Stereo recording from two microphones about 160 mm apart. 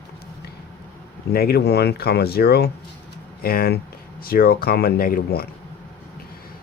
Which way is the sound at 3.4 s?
70° left (ahead or behind).